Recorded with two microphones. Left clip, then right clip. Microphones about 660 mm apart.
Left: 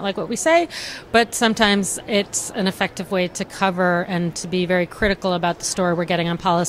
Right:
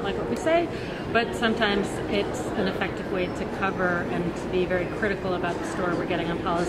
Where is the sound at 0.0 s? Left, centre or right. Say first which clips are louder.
Left 5 dB; left.